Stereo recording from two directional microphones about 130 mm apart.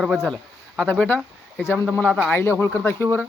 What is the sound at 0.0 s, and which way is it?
Speech, centre (ahead or behind).